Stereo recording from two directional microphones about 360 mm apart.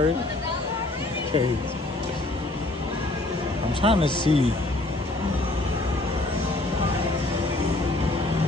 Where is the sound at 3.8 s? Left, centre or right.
Centre.